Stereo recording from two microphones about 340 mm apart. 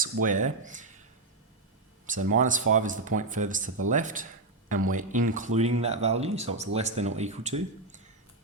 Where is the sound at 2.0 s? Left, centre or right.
Right.